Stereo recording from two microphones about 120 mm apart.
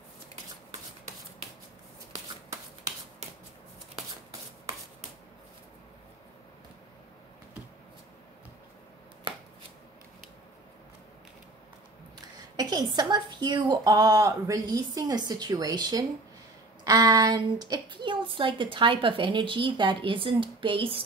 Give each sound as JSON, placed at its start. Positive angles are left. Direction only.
{"t": 12.4, "sound": "a woman's voice", "side_deg": -35}